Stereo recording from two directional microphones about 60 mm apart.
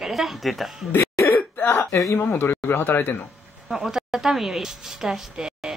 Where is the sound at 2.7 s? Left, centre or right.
Left.